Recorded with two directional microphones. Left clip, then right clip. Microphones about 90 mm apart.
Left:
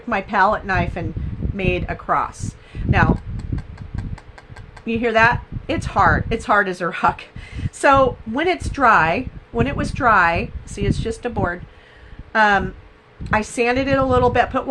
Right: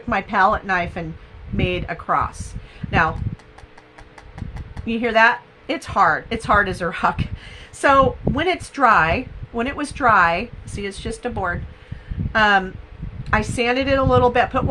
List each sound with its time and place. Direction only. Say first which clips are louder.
0.1 s a woman's voice: even; 40° left (ahead or behind)
2.7 s a sound: left 5 dB; 45° left (ahead or behind)
4.9 s a woman's voice: even; 40° left (ahead or behind)